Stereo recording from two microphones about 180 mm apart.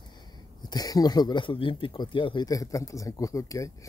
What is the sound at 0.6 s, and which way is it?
Speech, 20° left (ahead or behind).